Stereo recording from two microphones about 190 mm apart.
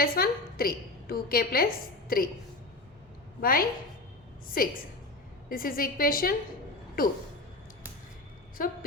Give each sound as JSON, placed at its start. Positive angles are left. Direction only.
{"t": 0.0, "sound": "a woman's voice", "side_deg": 50}
{"t": 3.4, "sound": "a woman's voice", "side_deg": 50}
{"t": 8.6, "sound": "a woman's voice", "side_deg": 45}